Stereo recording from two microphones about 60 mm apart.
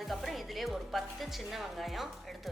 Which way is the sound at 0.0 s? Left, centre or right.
Centre.